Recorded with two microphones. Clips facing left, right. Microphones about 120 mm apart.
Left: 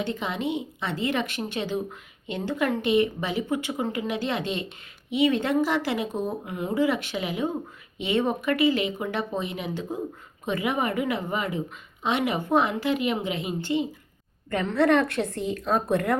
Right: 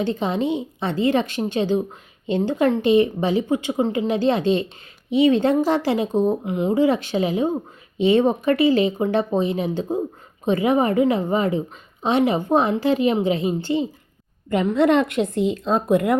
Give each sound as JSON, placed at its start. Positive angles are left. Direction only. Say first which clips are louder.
{"t": 0.0, "sound": "speech", "louder": "right 7 dB", "side_deg": -30}